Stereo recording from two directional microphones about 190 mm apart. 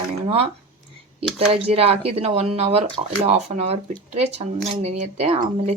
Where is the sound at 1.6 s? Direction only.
30° right (ahead or behind).